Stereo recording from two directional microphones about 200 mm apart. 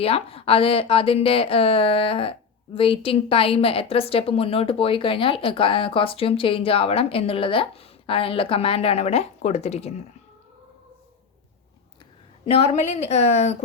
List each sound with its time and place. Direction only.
0.0 s a woman's voice: 30° left (ahead or behind)
12.5 s a woman's voice: 30° left (ahead or behind)